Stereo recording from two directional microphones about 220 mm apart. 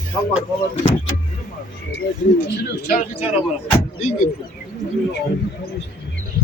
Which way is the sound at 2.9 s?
35° left (ahead or behind).